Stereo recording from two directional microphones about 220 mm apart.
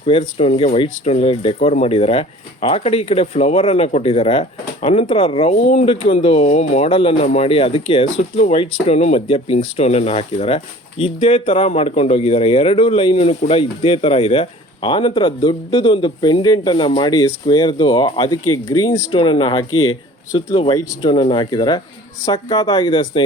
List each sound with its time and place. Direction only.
0.0 s speech: 25° left (ahead or behind)
18.4 s speech: 85° left
19.1 s speech: 20° left (ahead or behind)
19.7 s speech: 75° left (ahead or behind)
20.3 s speech: 25° left (ahead or behind)